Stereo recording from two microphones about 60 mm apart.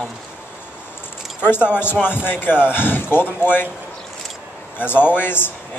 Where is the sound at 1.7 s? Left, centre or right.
Left.